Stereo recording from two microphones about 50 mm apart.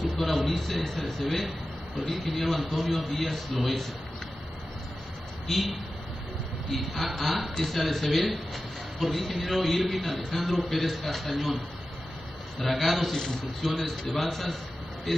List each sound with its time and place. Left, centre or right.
0.4 s a man's voice: centre
5.5 s a man's voice: centre
10.4 s a man's voice: centre
10.7 s a man's voice: centre